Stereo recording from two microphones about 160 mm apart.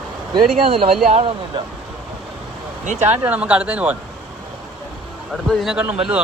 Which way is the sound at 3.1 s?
10° right (ahead or behind).